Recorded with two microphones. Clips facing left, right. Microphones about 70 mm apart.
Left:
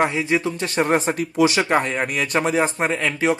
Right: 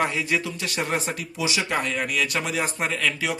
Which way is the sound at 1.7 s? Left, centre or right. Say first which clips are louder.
Left 5 dB; left.